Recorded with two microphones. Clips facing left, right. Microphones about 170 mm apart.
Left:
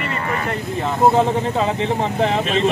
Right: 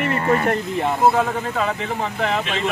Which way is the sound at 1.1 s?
25° left (ahead or behind).